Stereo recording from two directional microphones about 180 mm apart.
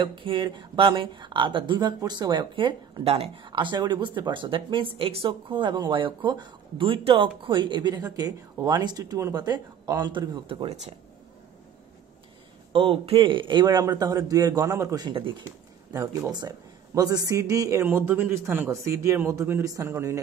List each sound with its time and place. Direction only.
0.0 s speech: 25° right (ahead or behind)
12.7 s a man's voice: 30° right (ahead or behind); by 20.2 s 15° right (ahead or behind)